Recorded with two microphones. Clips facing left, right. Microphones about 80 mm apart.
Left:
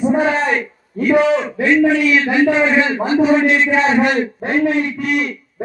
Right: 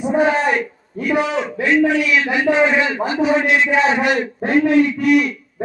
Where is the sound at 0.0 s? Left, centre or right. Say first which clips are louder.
Left 1 dB; left.